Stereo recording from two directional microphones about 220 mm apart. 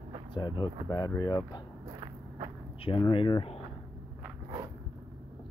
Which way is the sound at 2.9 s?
25° left (ahead or behind).